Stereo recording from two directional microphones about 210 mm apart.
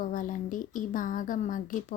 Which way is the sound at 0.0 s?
40° left (ahead or behind).